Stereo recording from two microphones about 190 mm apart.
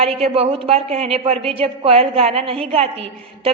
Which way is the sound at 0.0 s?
30° right (ahead or behind).